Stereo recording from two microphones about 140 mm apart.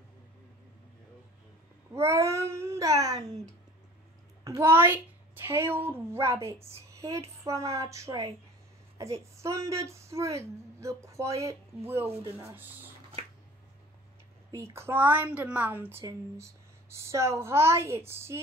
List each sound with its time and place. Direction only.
2.0 s speech: 20° right (ahead or behind)
4.6 s a woman's voice: 15° right (ahead or behind)
9.4 s a woman's voice: 20° right (ahead or behind)
14.5 s a woman's voice: 20° right (ahead or behind)